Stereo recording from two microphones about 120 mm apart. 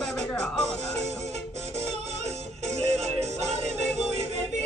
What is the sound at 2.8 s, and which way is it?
Music, 65° right (ahead or behind).